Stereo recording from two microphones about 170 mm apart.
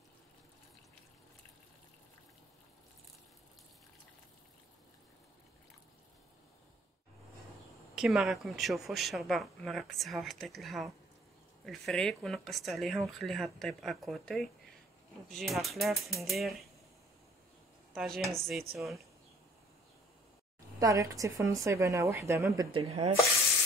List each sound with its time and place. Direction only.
7.9 s speech: centre (ahead or behind)
17.9 s speech: centre (ahead or behind)
20.8 s a woman's voice: 20° right (ahead or behind)
22.7 s rub: 35° right (ahead or behind)